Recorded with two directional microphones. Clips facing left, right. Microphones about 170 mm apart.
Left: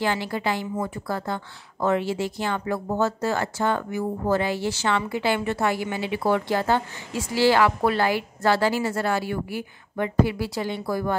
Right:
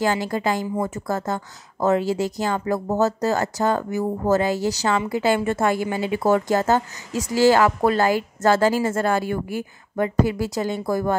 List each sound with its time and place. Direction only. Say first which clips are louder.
0.0 s speech: right 3 dB; 40° right (ahead or behind)